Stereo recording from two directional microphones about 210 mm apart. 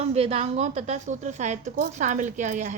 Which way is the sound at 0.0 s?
30° right (ahead or behind).